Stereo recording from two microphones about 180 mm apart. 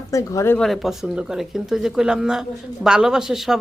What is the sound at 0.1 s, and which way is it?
Speech, 15° left (ahead or behind).